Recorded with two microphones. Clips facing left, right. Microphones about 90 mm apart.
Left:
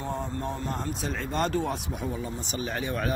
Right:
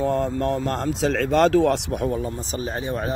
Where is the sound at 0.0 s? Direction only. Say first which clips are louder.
Right 10 dB; 90° right; by 2.3 s 55° right (ahead or behind).